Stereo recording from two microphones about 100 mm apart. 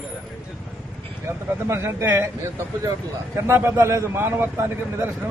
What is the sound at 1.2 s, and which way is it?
A man's voice, 25° right (ahead or behind).